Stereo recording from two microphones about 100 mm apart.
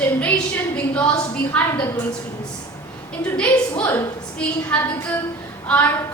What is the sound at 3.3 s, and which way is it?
A woman's voice, 10° left (ahead or behind).